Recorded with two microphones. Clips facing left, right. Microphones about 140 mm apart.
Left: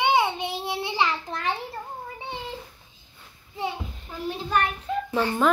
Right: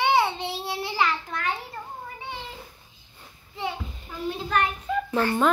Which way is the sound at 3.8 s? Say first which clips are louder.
Right 1 dB; centre (ahead or behind).